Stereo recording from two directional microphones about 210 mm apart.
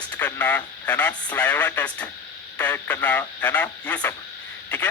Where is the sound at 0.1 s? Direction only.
5° left (ahead or behind).